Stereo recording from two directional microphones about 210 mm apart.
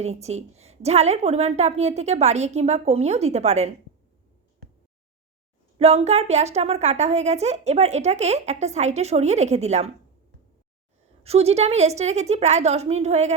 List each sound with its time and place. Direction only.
0.0 s a woman's voice: 30° right (ahead or behind)
5.8 s a woman's voice: 30° right (ahead or behind)
11.2 s a woman's voice: 30° right (ahead or behind)